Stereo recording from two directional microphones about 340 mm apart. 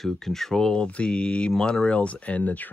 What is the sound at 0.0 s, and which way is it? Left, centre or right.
Speech, centre.